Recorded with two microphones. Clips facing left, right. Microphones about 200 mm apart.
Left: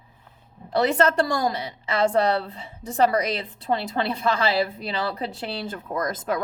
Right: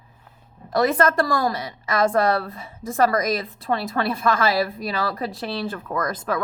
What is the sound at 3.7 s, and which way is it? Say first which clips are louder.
A woman's voice: right 1 dB; 20° left (ahead or behind).